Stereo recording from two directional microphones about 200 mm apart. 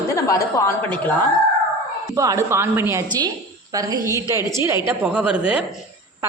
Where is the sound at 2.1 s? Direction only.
15° right (ahead or behind).